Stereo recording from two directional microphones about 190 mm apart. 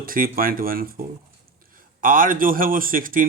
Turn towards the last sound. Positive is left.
turn(degrees=-45)  # may be behind; listen again after turning